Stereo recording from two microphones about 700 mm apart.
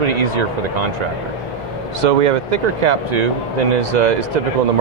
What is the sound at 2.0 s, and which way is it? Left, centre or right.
Speech, right.